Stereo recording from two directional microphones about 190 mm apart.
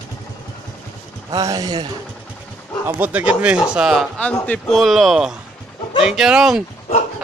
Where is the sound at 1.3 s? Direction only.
20° right (ahead or behind).